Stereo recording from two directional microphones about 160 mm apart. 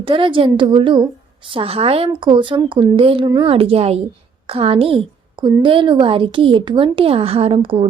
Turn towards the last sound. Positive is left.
turn(degrees=-35)  # may be behind; listen again after turning